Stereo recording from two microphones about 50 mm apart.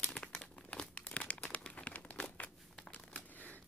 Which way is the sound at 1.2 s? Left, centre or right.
Left.